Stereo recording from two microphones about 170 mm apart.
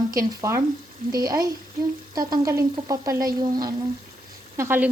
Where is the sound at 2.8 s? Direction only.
20° right (ahead or behind).